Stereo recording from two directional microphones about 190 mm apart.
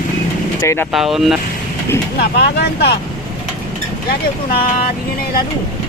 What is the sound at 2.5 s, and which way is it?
Speech, 60° left (ahead or behind).